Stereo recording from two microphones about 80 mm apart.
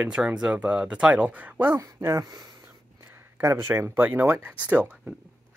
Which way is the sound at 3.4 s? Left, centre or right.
Right.